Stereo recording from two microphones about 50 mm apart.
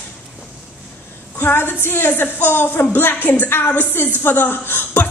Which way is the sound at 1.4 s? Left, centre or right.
Left.